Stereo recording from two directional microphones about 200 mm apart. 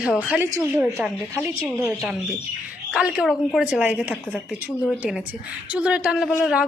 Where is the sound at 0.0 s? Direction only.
5° right (ahead or behind).